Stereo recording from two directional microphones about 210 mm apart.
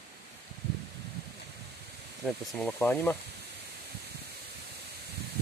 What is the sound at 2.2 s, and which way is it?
Speech, 5° left (ahead or behind).